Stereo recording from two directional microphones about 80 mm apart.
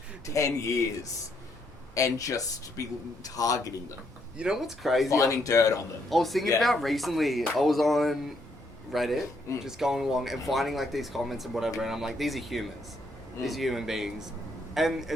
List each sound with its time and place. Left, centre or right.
0.3 s speech: left
2.0 s speech: left
4.4 s speech: centre
5.0 s speech: left
6.1 s a man's voice: centre